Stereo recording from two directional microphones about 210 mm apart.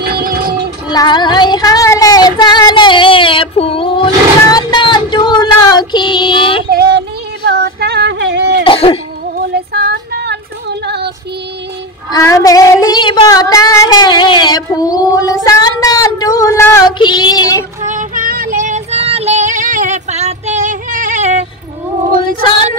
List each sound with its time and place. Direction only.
0.0 s a sound: 45° right (ahead or behind)
0.8 s child singing: 20° left (ahead or behind)
6.7 s female singing: 50° right (ahead or behind)
8.6 s cough: 25° left (ahead or behind)
9.5 s female singing: 50° right (ahead or behind)
12.1 s a sound: 15° left (ahead or behind)
17.8 s female singing: 40° right (ahead or behind)